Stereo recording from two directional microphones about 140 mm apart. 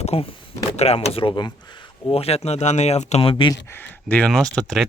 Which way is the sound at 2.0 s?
45° left (ahead or behind).